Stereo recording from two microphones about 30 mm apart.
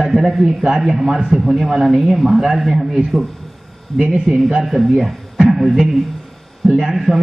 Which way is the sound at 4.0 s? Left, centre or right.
Right.